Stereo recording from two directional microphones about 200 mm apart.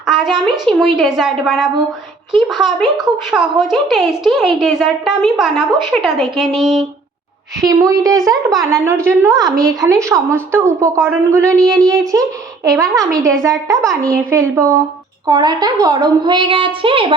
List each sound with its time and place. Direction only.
0.0 s a woman's voice: centre (ahead or behind)
7.6 s a woman's voice: 15° right (ahead or behind)
12.6 s a woman's voice: 15° right (ahead or behind)